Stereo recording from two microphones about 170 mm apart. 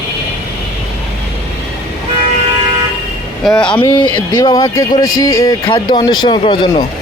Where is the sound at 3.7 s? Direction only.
30° left (ahead or behind).